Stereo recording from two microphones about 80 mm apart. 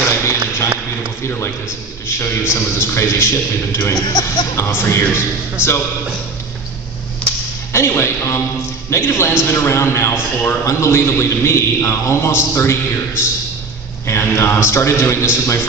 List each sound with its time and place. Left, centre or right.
0.2 s a sound: left
2.0 s a man's voice: left
3.9 s speech: left
4.6 s a man's voice: left
7.2 s whip: centre
7.7 s a man's voice: left